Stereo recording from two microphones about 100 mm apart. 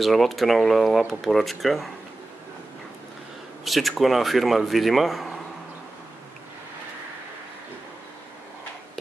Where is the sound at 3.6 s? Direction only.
Centre (ahead or behind).